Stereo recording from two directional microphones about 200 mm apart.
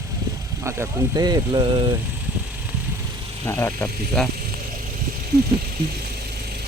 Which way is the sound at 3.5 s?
10° left (ahead or behind).